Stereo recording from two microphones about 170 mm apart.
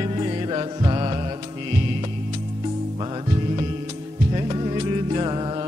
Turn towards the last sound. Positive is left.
turn(degrees=-30)  # may be behind; listen again after turning